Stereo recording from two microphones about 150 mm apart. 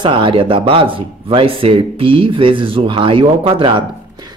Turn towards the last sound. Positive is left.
turn(degrees=-35)  # may be behind; listen again after turning